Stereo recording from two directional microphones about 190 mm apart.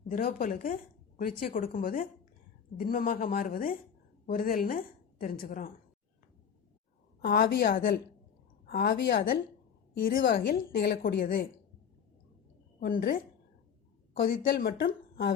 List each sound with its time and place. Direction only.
0.1 s a woman's voice: 50° left (ahead or behind)
7.2 s a woman's voice: 50° left (ahead or behind)
12.8 s a woman's voice: 50° left (ahead or behind)